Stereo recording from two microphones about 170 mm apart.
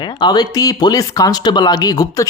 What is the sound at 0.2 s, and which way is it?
Speech, 25° left (ahead or behind).